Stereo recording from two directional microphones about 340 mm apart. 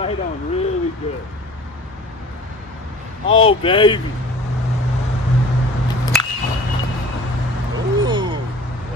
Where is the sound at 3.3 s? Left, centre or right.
Centre.